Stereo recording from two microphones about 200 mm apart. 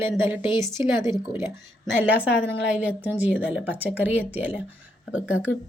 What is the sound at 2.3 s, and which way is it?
Speech, 65° left (ahead or behind).